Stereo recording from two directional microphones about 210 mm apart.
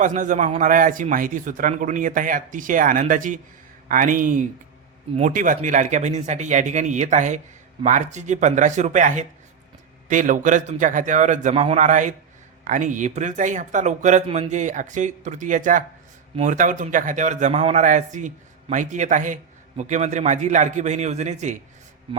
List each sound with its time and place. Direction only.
0.0 s speech: 35° right (ahead or behind)